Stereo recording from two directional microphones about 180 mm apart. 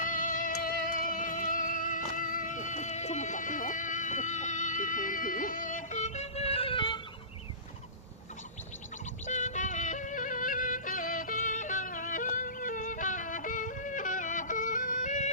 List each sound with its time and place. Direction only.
0.0 s music: 45° left (ahead or behind); by 7.0 s 25° left (ahead or behind)
9.2 s music: 40° left (ahead or behind)